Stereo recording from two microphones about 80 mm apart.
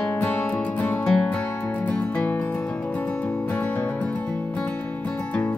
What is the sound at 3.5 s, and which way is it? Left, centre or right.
Music, centre.